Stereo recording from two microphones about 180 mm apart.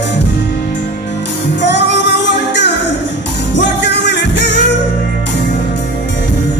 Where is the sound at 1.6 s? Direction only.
75° left (ahead or behind).